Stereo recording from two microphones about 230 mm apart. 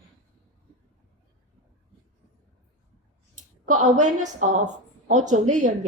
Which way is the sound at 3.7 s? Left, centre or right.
Right.